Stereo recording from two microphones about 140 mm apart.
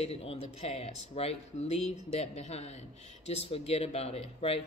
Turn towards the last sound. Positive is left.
turn(degrees=45)  # may be behind; listen again after turning